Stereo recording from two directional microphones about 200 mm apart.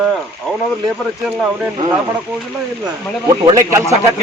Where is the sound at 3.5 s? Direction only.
15° right (ahead or behind).